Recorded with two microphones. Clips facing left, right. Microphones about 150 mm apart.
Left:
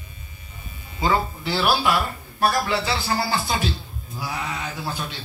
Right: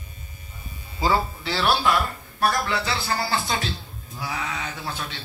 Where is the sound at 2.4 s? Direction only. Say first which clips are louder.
Left 2 dB; 30° left (ahead or behind).